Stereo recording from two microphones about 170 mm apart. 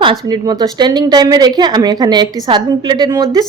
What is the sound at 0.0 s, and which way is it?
Speech, 25° right (ahead or behind).